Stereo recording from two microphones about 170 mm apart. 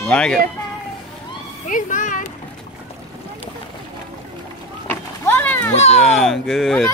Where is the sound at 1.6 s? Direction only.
50° left (ahead or behind).